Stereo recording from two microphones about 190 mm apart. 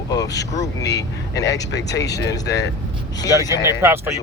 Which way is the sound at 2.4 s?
60° left (ahead or behind).